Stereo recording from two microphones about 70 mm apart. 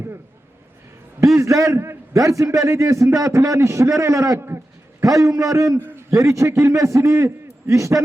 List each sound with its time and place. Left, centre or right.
1.4 s a man's voice: right
5.0 s a man's voice: right